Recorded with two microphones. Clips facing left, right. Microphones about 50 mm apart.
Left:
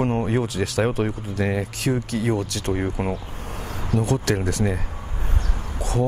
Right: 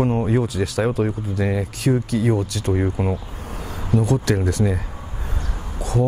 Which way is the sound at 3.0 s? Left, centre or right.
Left.